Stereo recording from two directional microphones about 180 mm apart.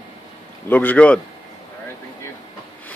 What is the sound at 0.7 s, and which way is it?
Speech, 10° left (ahead or behind).